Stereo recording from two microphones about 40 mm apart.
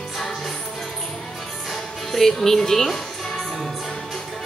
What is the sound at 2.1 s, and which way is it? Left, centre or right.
Speech, centre.